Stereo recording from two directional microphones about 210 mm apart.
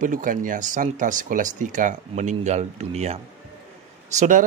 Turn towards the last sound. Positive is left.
turn(degrees=-35)  # may be behind; listen again after turning